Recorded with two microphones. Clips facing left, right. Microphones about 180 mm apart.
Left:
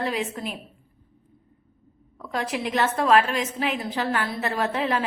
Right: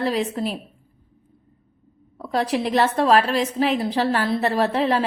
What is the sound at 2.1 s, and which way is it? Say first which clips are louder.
A woman's voice: right 6 dB; 35° right (ahead or behind).